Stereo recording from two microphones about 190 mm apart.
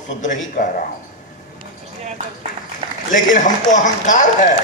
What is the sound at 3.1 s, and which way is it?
Speech, 40° left (ahead or behind).